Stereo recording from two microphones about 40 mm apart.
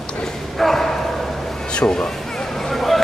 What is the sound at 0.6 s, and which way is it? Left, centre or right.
Speech, centre.